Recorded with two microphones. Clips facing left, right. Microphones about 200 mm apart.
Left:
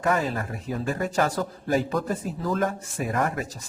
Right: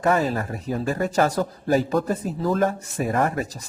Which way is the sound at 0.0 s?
35° right (ahead or behind).